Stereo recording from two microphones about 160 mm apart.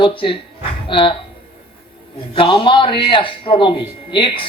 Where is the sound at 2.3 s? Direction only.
30° left (ahead or behind).